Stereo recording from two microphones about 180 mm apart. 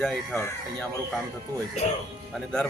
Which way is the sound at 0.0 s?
Centre (ahead or behind).